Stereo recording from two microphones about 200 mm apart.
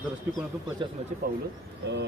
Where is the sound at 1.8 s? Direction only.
55° right (ahead or behind).